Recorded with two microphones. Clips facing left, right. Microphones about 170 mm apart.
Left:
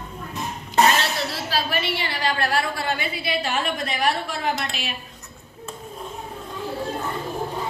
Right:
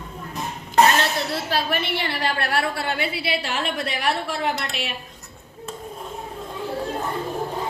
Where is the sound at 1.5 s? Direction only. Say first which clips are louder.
Left 1 dB; 55° right (ahead or behind).